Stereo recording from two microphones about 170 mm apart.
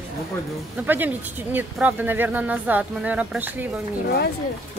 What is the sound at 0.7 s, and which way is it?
Speech, 10° right (ahead or behind).